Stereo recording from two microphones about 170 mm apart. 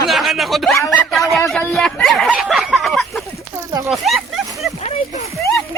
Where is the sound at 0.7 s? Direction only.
15° left (ahead or behind).